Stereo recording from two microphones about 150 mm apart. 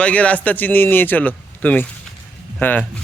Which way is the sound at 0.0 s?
10° left (ahead or behind).